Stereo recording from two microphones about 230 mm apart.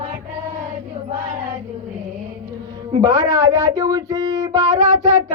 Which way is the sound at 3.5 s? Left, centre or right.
Centre.